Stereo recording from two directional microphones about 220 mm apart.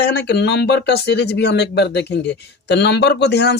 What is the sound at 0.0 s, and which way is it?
Speech, 50° left (ahead or behind).